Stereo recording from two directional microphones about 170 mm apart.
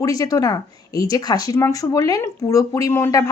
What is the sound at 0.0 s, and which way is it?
Speech, 20° left (ahead or behind).